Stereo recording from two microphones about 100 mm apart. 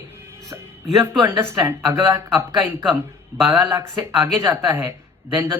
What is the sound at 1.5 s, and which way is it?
Speech, 25° right (ahead or behind).